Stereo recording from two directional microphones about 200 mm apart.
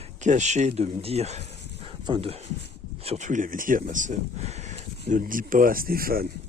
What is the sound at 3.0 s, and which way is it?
Speech, 35° right (ahead or behind).